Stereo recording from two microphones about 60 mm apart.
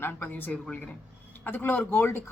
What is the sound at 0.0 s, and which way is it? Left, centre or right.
Speech, left.